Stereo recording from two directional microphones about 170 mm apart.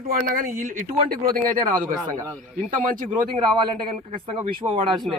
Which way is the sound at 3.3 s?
25° right (ahead or behind).